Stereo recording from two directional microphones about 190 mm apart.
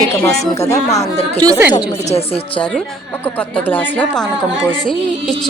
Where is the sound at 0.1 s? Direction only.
15° left (ahead or behind).